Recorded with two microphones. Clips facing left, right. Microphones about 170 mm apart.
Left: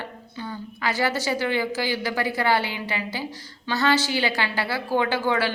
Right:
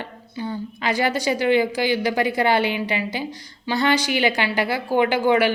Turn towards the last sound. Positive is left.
turn(degrees=-15)  # may be behind; listen again after turning